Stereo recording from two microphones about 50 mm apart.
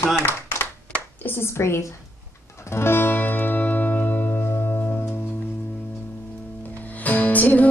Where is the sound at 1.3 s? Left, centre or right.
Left.